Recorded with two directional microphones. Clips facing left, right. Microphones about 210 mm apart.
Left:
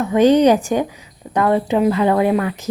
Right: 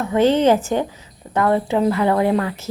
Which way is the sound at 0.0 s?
15° left (ahead or behind).